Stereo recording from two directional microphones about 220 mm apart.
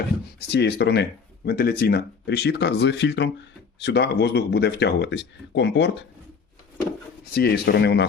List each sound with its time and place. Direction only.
0.3 s speech: 50° left (ahead or behind)
7.3 s speech: 45° left (ahead or behind)